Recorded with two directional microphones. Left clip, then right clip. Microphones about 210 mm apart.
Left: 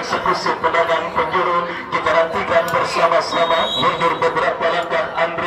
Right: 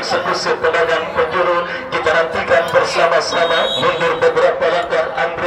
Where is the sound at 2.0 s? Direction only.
50° right (ahead or behind).